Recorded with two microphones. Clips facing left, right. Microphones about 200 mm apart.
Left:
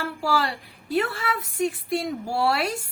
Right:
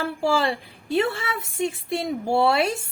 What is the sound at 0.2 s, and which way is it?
A woman's voice, 25° right (ahead or behind).